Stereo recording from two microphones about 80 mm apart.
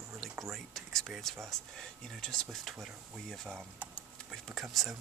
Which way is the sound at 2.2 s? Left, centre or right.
Centre.